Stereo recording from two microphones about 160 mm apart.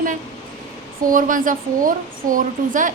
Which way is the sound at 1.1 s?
55° right (ahead or behind).